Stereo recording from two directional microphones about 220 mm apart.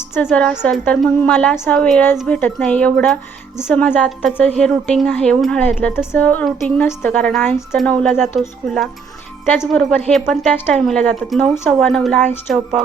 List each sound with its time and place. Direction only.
0.1 s a woman's voice: 10° left (ahead or behind)